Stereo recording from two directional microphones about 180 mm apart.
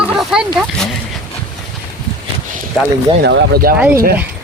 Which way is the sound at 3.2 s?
60° right (ahead or behind).